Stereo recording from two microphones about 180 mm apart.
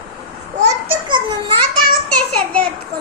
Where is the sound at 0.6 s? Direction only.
30° right (ahead or behind).